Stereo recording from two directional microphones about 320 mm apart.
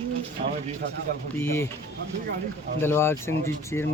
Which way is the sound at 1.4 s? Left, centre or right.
Centre.